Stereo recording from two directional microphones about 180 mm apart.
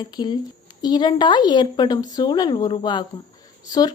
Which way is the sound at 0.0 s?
25° left (ahead or behind).